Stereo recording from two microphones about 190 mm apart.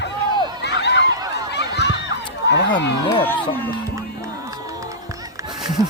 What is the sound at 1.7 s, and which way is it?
Run, 65° left (ahead or behind).